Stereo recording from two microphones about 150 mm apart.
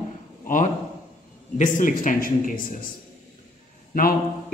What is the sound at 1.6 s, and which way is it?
Speech, 60° left (ahead or behind).